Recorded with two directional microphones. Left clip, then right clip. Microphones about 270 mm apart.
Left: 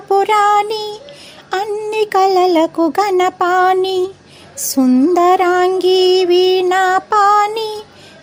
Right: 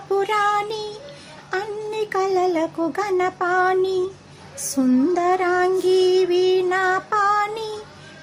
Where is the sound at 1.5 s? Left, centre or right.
Left.